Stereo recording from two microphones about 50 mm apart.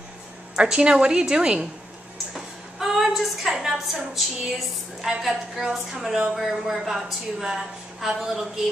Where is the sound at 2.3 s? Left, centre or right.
Centre.